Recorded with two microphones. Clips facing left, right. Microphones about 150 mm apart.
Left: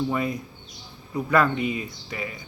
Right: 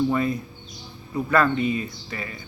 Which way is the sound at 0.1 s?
10° left (ahead or behind).